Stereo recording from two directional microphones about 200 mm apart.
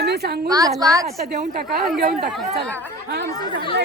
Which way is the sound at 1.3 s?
45° right (ahead or behind).